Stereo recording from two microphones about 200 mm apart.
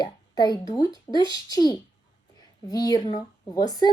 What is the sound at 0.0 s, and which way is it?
Speech, 20° left (ahead or behind).